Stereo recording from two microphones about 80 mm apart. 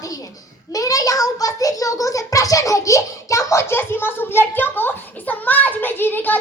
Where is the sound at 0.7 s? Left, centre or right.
Left.